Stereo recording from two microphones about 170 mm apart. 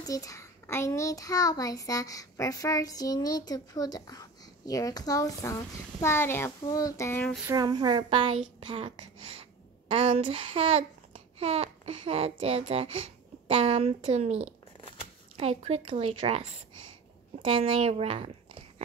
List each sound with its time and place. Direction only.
0.0 s a child's voice: 20° left (ahead or behind)
7.5 s a woman's voice: 25° right (ahead or behind)